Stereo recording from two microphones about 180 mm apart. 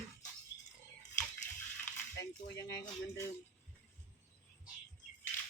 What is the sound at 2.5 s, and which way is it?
Speech, 20° left (ahead or behind).